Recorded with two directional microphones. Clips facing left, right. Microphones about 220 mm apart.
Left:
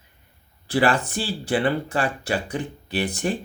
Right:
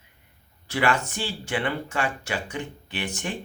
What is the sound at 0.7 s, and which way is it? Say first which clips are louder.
Speech: left 4 dB; 35° left (ahead or behind).